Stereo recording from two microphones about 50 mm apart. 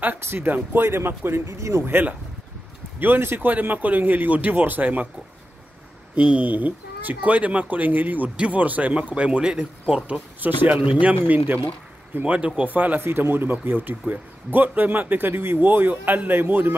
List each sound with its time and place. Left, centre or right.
0.2 s speech: right
3.3 s speech: right
6.1 s speech: right
12.4 s speech: right
12.6 s speech: right
13.0 s speech: right